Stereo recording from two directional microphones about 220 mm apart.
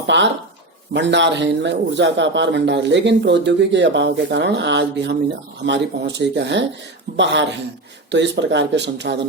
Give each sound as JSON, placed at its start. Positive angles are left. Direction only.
{"t": 0.1, "sound": "a man's voice", "side_deg": -55}
{"t": 8.1, "sound": "a man's voice", "side_deg": -55}